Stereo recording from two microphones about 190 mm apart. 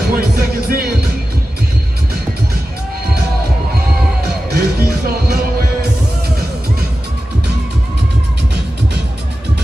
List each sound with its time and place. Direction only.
0.1 s music: 50° right (ahead or behind)
4.5 s music: 55° right (ahead or behind)